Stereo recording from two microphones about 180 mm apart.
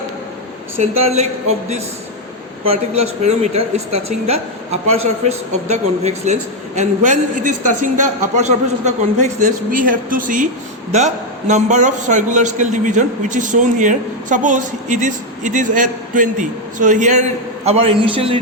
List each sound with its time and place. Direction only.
0.8 s a man's voice: 35° right (ahead or behind)
17.7 s speech: 30° right (ahead or behind)